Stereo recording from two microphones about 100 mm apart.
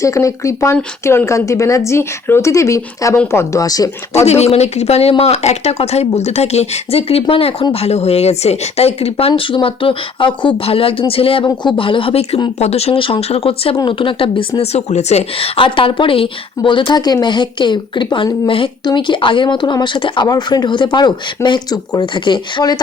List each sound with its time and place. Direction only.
0.0 s a woman's voice: 30° left (ahead or behind)
4.3 s speech: 90° left; by 11.4 s 70° left (ahead or behind)
11.4 s a woman's voice: 55° left (ahead or behind); by 12.4 s 70° left (ahead or behind)
12.5 s speech: 90° left
13.7 s a woman's voice: 55° left (ahead or behind)